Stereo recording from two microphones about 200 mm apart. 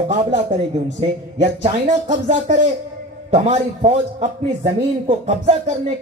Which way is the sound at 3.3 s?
35° right (ahead or behind).